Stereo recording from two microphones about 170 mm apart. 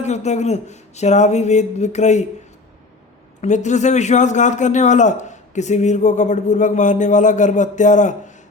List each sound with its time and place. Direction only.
0.0 s speech: 40° left (ahead or behind)
3.4 s a man's voice: 45° left (ahead or behind)